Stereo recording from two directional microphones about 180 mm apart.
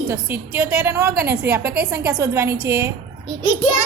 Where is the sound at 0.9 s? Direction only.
55° right (ahead or behind).